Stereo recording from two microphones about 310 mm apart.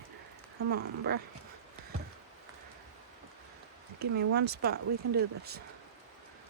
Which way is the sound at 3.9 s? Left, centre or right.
Right.